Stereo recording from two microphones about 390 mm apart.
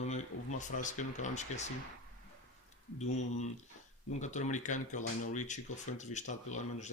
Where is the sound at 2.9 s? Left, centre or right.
Centre.